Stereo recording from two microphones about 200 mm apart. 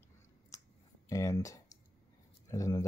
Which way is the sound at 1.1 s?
15° left (ahead or behind).